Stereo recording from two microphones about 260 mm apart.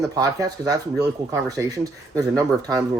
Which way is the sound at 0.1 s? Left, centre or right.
Centre.